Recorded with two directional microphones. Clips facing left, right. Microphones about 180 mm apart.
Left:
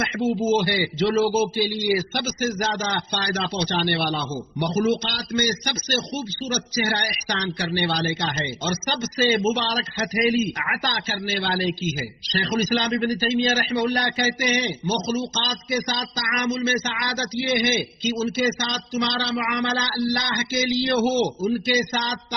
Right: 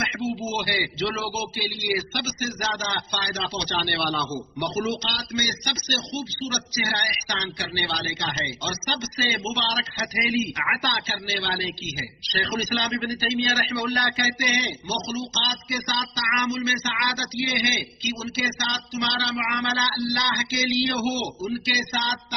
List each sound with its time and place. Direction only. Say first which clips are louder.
0.5 s speech: left 7 dB; 50° left (ahead or behind)